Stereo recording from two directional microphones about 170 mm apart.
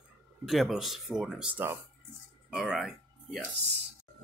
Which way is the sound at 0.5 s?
Centre (ahead or behind).